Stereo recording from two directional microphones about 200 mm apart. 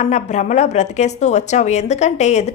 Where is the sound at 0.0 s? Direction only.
35° left (ahead or behind).